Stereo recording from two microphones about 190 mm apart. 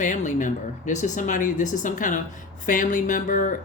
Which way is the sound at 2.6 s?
40° left (ahead or behind).